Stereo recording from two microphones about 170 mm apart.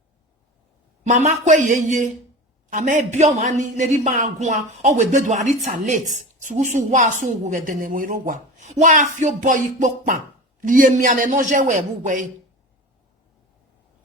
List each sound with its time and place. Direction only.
1.0 s a woman's voice: 45° right (ahead or behind)